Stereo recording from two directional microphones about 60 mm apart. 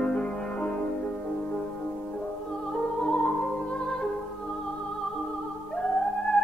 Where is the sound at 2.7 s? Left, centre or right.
Centre.